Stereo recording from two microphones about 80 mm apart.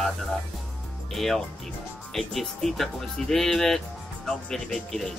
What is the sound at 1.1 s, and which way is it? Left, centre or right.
Speech, centre.